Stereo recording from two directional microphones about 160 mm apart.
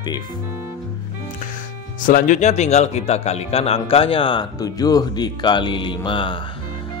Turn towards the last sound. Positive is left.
turn(degrees=30)  # may be behind; listen again after turning